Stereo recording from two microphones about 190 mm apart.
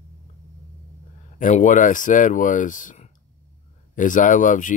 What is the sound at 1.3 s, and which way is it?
Speech, 45° left (ahead or behind).